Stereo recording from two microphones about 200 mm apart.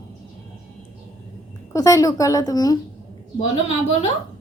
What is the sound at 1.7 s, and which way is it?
A woman's voice, 15° left (ahead or behind).